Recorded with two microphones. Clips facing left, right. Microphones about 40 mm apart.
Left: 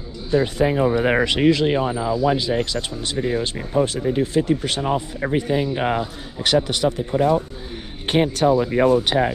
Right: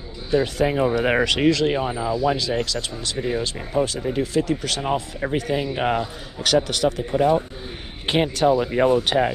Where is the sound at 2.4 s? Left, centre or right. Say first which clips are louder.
Left 2 dB; left.